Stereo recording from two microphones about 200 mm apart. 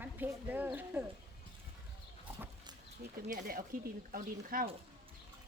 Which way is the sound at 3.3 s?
45° right (ahead or behind).